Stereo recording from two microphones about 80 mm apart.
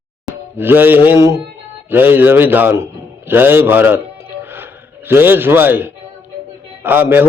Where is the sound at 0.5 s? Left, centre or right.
Right.